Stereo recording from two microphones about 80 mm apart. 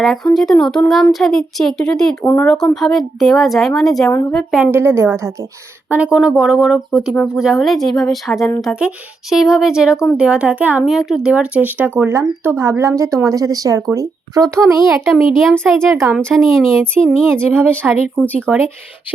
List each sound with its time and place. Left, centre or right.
0.0 s a woman's voice: centre
4.1 s a woman's voice: left
4.7 s a woman's voice: right
5.9 s a woman's voice: centre
10.8 s a woman's voice: centre; by 15.1 s right
15.1 s a woman's voice: centre
15.9 s a woman's voice: right
16.3 s speech: centre
17.5 s speech: right